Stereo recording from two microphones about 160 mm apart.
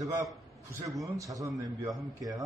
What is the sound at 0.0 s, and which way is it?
A man's voice, 20° right (ahead or behind).